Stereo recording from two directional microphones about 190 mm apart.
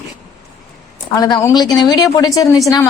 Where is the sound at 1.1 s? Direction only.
20° left (ahead or behind).